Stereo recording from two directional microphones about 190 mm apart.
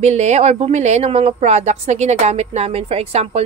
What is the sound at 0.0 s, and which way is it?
Speech, 35° right (ahead or behind).